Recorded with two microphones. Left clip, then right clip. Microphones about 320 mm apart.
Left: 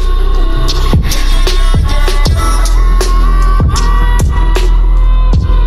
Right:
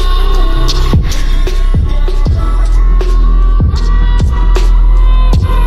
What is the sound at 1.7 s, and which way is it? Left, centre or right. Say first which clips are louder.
Music: left 6 dB; left.